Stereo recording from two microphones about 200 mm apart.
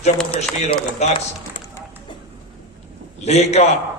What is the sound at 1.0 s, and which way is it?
Speech, 35° left (ahead or behind).